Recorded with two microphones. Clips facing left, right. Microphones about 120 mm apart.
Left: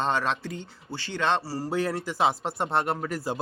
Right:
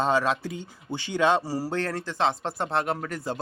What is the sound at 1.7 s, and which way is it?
Speech, 10° left (ahead or behind).